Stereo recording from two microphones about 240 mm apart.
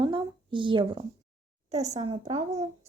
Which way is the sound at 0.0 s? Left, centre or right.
Centre.